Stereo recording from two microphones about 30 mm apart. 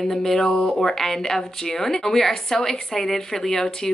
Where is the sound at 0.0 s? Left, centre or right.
Centre.